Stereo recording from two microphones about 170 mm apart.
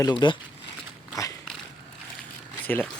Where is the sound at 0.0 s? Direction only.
25° left (ahead or behind).